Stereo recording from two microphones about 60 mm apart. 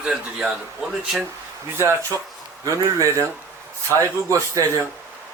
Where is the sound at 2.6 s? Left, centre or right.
Right.